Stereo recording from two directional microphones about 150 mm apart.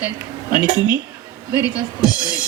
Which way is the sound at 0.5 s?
25° left (ahead or behind).